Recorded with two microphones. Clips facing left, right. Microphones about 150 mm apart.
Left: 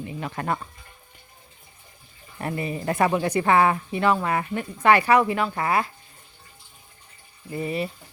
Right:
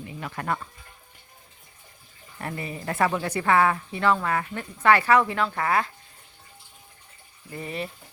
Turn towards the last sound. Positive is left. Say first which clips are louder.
# left 5 dB
turn(degrees=5)  # may be behind; listen again after turning